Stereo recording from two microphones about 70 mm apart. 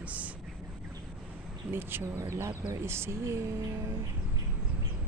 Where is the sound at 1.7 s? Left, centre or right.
Right.